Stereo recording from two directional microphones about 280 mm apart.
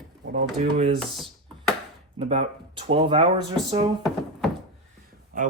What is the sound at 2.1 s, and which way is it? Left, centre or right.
Speech, centre.